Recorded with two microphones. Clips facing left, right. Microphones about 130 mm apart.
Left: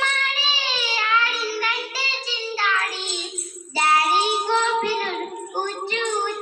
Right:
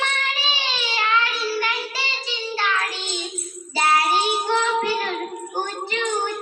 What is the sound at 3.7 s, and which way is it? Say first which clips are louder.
Child singing: even; 10° left (ahead or behind).